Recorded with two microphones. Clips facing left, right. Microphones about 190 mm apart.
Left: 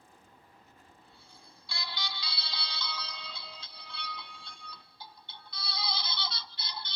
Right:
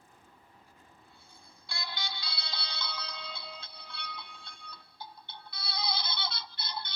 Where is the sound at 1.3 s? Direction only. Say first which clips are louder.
Right 1 dB; 50° right (ahead or behind).